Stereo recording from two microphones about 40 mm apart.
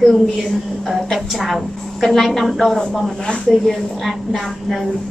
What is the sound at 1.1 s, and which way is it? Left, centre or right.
A woman's voice, centre.